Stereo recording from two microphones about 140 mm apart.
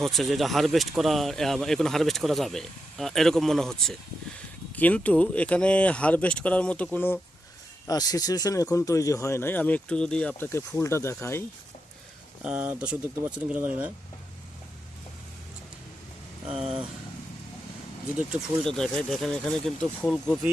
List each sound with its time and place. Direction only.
0.0 s speech: centre (ahead or behind)
7.9 s speech: 25° left (ahead or behind)
12.4 s speech: 10° right (ahead or behind)
18.2 s speech: 5° right (ahead or behind)